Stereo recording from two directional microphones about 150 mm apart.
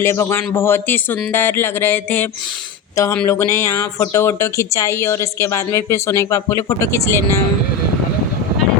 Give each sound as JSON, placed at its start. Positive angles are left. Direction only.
{"t": 0.0, "sound": "speech", "side_deg": 15}